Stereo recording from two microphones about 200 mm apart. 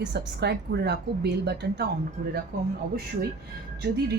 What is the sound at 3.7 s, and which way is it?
Speech, 50° right (ahead or behind).